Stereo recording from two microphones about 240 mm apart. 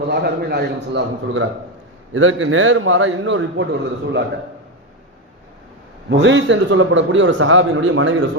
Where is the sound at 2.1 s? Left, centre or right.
Right.